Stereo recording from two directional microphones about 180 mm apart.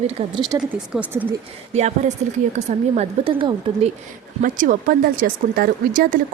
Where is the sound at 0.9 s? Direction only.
5° right (ahead or behind).